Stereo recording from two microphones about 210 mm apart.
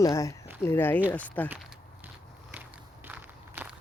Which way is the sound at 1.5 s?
10° right (ahead or behind).